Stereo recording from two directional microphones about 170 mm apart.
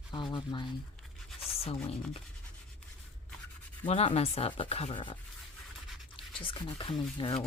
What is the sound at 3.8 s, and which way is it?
Speech, 35° left (ahead or behind).